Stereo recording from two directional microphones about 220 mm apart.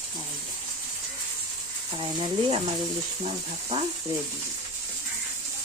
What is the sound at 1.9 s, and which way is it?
Speech, 25° right (ahead or behind).